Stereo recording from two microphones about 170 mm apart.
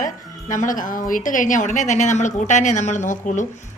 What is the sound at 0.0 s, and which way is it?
A woman's voice, 50° left (ahead or behind).